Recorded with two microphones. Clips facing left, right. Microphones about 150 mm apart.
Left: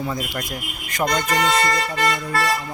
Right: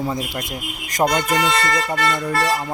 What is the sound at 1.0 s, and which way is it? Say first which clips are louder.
Speech: right 4 dB; 40° right (ahead or behind).